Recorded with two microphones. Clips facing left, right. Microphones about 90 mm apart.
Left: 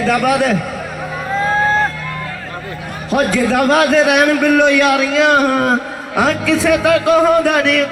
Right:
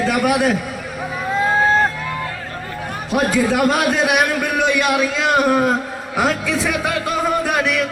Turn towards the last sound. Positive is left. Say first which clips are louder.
# left 5 dB
turn(degrees=-5)  # may be behind; listen again after turning